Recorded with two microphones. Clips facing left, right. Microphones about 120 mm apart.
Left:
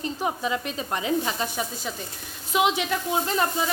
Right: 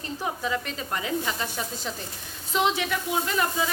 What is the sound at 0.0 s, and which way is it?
Speech, 20° left (ahead or behind).